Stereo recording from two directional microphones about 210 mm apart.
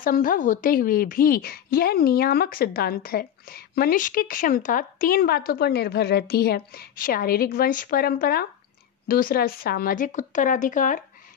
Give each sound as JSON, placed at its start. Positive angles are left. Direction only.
{"t": 0.0, "sound": "a woman's voice", "side_deg": 40}